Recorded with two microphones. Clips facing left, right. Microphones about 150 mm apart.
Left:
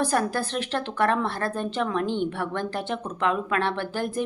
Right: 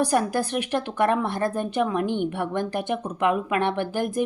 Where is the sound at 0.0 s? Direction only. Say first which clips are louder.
Right 2 dB; 15° right (ahead or behind).